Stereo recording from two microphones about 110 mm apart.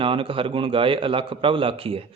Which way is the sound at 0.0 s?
55° right (ahead or behind).